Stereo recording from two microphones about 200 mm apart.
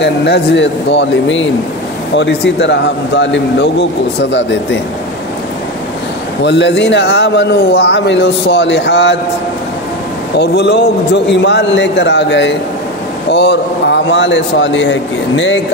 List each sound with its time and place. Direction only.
0.0 s speech: 60° left (ahead or behind)
6.4 s speech: 60° left (ahead or behind)
10.3 s speech: 55° left (ahead or behind)